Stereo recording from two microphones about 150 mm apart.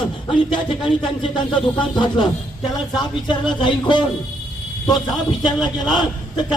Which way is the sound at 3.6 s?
30° left (ahead or behind).